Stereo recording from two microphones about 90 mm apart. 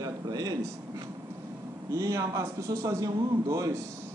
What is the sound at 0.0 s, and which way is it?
Speech, 45° right (ahead or behind).